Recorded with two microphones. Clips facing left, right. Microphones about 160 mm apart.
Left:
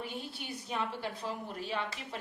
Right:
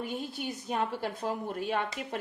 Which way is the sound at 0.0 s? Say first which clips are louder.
Right 6 dB; 45° right (ahead or behind).